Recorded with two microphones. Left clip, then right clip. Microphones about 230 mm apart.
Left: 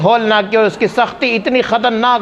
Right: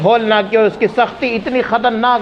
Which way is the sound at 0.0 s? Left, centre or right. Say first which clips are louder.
Left 1 dB; left.